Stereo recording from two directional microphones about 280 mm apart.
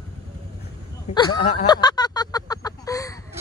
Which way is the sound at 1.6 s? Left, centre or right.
Centre.